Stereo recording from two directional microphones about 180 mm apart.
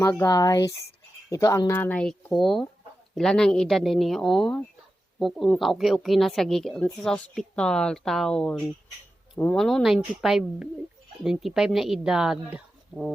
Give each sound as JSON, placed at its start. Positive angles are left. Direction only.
{"t": 0.0, "sound": "a woman's voice", "side_deg": 15}